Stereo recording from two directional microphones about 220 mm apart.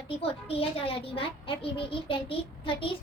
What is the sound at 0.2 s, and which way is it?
A child's voice, 25° left (ahead or behind).